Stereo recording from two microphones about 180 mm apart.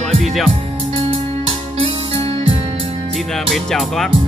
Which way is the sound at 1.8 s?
30° right (ahead or behind).